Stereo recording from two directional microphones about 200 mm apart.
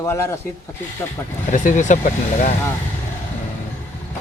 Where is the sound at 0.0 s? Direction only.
15° left (ahead or behind).